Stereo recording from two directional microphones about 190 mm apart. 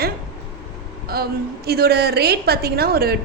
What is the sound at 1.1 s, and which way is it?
A woman's voice, 55° right (ahead or behind).